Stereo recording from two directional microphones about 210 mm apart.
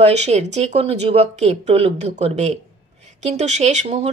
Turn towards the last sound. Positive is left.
turn(degrees=-35)  # may be behind; listen again after turning